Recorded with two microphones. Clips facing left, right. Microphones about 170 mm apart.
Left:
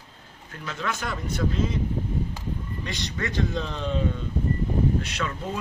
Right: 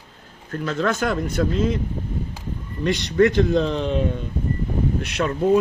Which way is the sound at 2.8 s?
65° right (ahead or behind).